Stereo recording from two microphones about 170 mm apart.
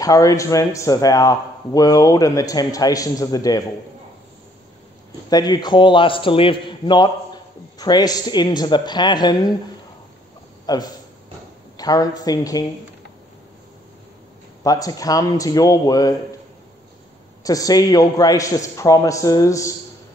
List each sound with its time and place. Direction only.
0.0 s a man's voice: 20° left (ahead or behind)
5.3 s a man's voice: 25° left (ahead or behind)
10.7 s a man's voice: 25° left (ahead or behind)
14.6 s a man's voice: 20° left (ahead or behind)
17.4 s a man's voice: 20° left (ahead or behind)